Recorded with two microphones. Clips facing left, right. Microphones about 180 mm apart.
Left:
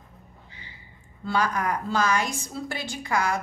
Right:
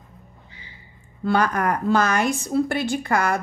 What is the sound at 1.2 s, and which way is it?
Speech, 55° right (ahead or behind).